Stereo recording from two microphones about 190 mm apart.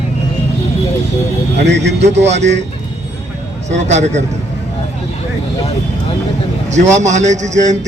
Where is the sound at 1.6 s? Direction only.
65° right (ahead or behind).